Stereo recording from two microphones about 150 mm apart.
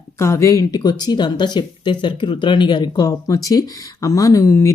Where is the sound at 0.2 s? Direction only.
20° left (ahead or behind).